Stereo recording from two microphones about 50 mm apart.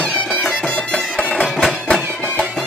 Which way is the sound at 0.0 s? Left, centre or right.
Centre.